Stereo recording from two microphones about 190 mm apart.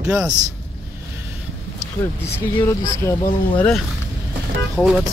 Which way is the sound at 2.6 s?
10° left (ahead or behind).